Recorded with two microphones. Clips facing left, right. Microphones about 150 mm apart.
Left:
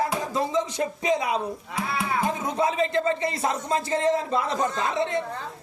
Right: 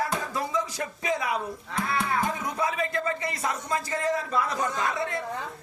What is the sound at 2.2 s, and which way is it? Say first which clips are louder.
Speech: left 4 dB; 25° left (ahead or behind).